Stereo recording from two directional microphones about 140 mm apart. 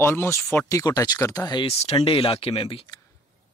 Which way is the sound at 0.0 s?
15° left (ahead or behind).